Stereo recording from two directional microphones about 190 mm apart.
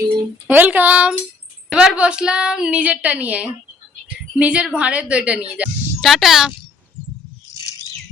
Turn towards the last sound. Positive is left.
turn(degrees=15)  # may be behind; listen again after turning